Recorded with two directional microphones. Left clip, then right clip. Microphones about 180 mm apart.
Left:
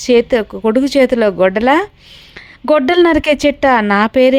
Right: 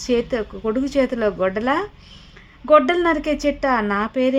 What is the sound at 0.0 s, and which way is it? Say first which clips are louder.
Speech: left 10 dB; 35° left (ahead or behind).